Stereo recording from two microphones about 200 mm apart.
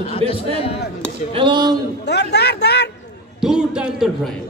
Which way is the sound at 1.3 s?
25° right (ahead or behind).